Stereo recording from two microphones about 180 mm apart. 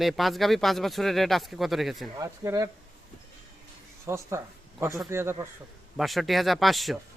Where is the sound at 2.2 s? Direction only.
15° right (ahead or behind).